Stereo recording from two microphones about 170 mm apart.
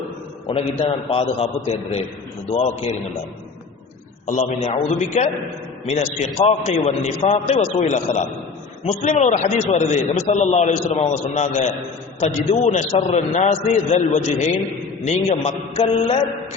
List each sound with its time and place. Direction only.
0.4 s a man's voice: 35° left (ahead or behind)
4.3 s a man's voice: 40° left (ahead or behind)